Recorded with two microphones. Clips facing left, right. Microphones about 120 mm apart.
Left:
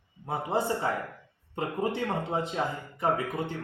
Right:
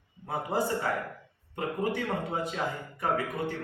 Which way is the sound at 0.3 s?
25° left (ahead or behind).